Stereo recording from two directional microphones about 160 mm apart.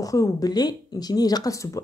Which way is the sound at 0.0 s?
20° left (ahead or behind).